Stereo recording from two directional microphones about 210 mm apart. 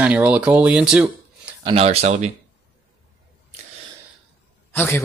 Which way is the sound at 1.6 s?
30° right (ahead or behind).